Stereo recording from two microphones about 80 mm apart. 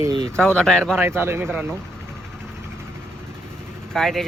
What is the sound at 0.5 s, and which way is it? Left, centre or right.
Speech, centre.